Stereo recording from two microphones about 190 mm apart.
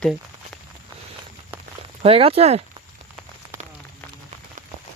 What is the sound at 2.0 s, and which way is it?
Speech, 30° right (ahead or behind).